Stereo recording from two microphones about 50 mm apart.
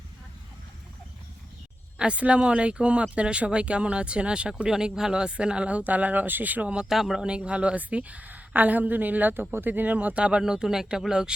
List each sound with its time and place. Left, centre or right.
2.0 s speech: right
4.7 s speech: centre; by 6.7 s right
6.7 s speech: centre
7.2 s a woman's voice: centre; by 9.3 s right
9.3 s a woman's voice: right
10.2 s speech: centre